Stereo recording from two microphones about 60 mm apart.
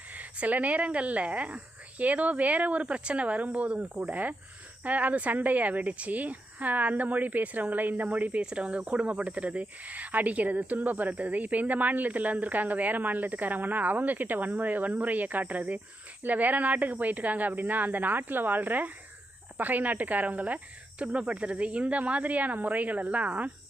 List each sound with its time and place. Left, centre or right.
0.1 s speech: right